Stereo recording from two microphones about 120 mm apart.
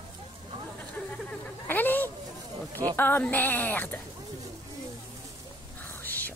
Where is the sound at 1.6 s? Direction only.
15° left (ahead or behind).